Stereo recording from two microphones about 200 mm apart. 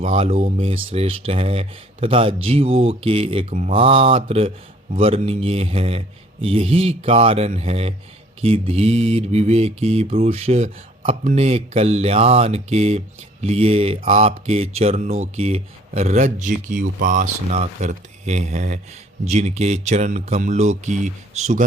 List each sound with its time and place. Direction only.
0.0 s speech: 30° right (ahead or behind)
8.4 s mantra: 30° right (ahead or behind)
13.4 s speech: 30° right (ahead or behind)
14.8 s mantra: 30° right (ahead or behind)